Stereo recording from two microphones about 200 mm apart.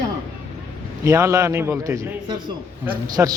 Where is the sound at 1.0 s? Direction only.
15° right (ahead or behind).